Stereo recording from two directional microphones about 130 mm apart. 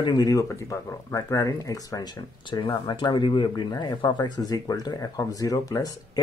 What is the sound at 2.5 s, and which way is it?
Speech, 40° left (ahead or behind).